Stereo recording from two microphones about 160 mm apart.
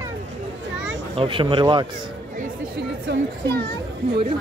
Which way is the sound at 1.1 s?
35° right (ahead or behind).